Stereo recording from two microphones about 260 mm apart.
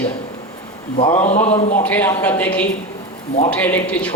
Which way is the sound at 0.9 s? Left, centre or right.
Left.